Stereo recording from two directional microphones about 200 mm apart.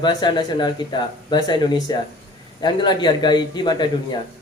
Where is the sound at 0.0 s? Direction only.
20° left (ahead or behind).